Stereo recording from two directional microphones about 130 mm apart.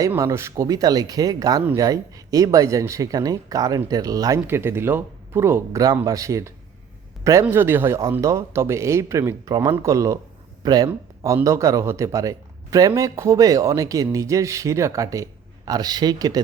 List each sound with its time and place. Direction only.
0.2 s speech: 20° right (ahead or behind)